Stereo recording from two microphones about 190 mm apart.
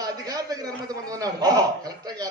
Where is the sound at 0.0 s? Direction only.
20° right (ahead or behind).